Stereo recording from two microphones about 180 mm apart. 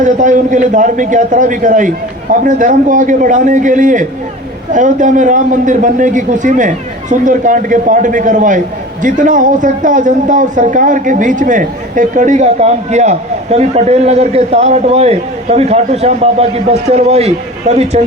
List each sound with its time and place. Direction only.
0.0 s a man's voice: 45° right (ahead or behind)